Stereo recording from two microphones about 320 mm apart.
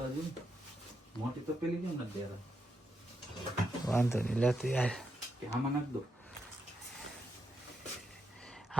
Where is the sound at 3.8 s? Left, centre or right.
Centre.